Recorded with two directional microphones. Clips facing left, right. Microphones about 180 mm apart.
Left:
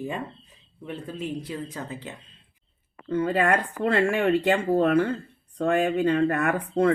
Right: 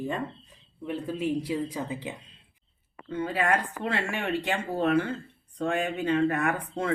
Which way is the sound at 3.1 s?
55° left (ahead or behind).